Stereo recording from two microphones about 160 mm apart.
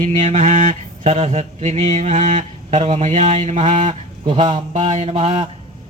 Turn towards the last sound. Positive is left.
turn(degrees=-35)  # may be behind; listen again after turning